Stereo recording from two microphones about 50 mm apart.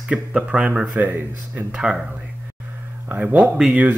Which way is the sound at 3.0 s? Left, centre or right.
Right.